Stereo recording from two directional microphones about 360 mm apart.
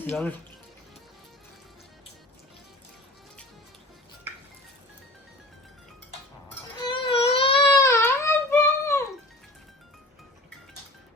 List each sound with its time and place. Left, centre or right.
0.1 s speech: centre
6.7 s baby cry: centre